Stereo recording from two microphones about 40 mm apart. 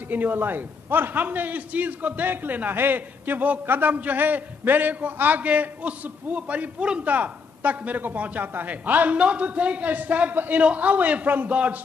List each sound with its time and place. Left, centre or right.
0.1 s a man's voice: right
2.7 s a man's voice: right
9.2 s speech: right